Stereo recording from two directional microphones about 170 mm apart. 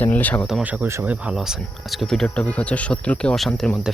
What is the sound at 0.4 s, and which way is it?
Speech, 5° right (ahead or behind).